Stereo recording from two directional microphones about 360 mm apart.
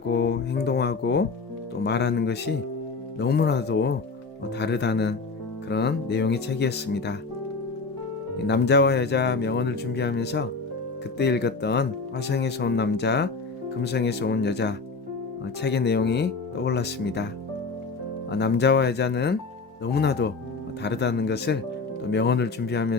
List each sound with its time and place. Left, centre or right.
0.1 s music: left
1.8 s speech: left
8.4 s speech: left
18.3 s speech: left